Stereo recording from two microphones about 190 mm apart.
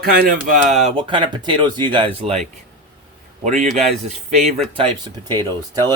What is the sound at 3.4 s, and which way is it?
Speech, 35° right (ahead or behind).